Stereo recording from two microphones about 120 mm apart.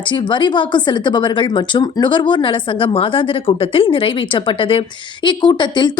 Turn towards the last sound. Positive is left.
turn(degrees=40)  # may be behind; listen again after turning